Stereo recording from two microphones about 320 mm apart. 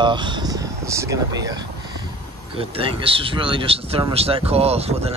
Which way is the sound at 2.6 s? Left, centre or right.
Centre.